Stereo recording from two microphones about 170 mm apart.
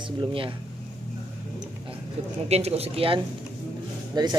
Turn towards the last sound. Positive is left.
turn(degrees=-25)  # may be behind; listen again after turning